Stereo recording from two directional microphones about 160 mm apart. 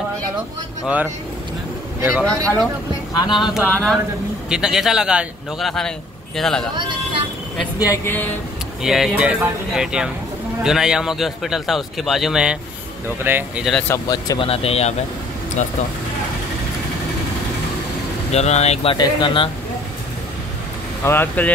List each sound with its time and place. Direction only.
2.2 s speech: 5° left (ahead or behind)
3.1 s speech: 25° left (ahead or behind)
3.3 s a man's voice: 5° right (ahead or behind)
3.7 s speech: 5° left (ahead or behind)
4.5 s a man's voice: 5° right (ahead or behind)
7.8 s speech: 15° left (ahead or behind)
8.8 s a man's voice: 5° right (ahead or behind)
13.8 s speech: 20° left (ahead or behind)
14.4 s speech: 35° left (ahead or behind)
18.3 s speech: 45° left (ahead or behind)
18.9 s speech: 30° left (ahead or behind)
21.0 s speech: 15° left (ahead or behind)